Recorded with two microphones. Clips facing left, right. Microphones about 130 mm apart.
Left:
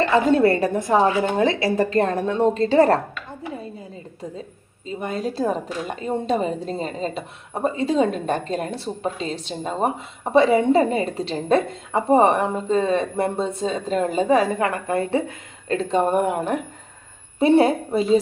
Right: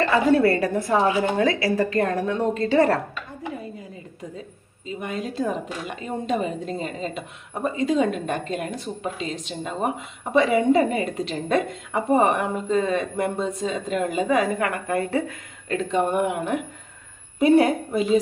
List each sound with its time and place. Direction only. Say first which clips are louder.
0.0 s a woman's voice: left 1 dB; 25° left (ahead or behind)
4.9 s speech: left 3 dB; 35° left (ahead or behind)